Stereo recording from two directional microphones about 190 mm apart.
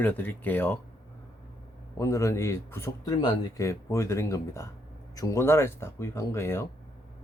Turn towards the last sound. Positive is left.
turn(degrees=15)  # may be behind; listen again after turning